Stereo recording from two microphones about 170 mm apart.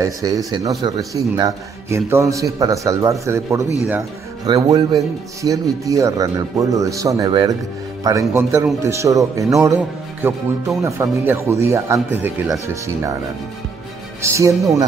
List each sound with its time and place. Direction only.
0.0 s a man's voice: 20° right (ahead or behind)
14.2 s speech: 15° right (ahead or behind)